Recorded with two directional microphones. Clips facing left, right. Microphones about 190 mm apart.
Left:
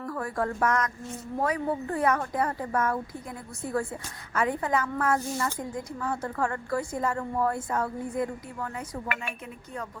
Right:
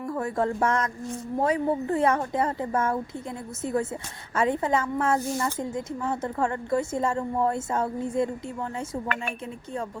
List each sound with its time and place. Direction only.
0.0 s a woman's voice: 20° right (ahead or behind)